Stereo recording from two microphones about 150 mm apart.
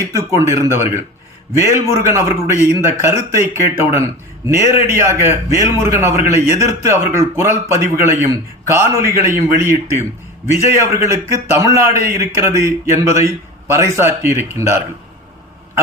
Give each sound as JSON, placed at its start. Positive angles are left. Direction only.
{"t": 0.0, "sound": "a man's voice", "side_deg": -20}